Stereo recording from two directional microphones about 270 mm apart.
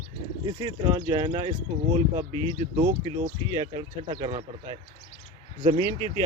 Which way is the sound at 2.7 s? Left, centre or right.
Right.